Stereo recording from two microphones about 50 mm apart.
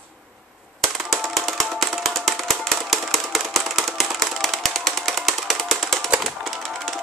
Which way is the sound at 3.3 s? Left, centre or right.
Centre.